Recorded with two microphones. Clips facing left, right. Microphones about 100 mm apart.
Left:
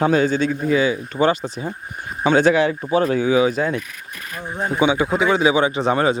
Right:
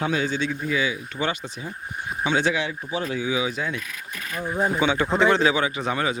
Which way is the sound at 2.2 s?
50° left (ahead or behind).